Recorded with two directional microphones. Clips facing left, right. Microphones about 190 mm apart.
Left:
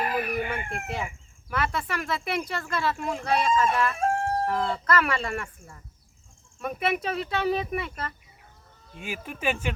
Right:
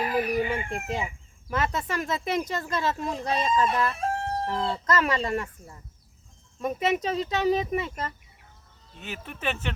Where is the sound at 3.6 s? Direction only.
45° left (ahead or behind).